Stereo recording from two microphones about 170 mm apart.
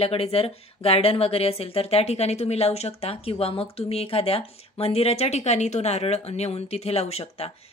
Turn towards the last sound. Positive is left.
turn(degrees=35)  # may be behind; listen again after turning